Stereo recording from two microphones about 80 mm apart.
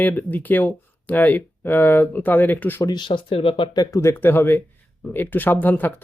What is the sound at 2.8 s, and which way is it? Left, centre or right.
Speech, left.